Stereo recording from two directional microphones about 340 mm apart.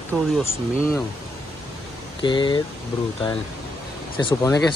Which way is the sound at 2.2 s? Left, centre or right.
Centre.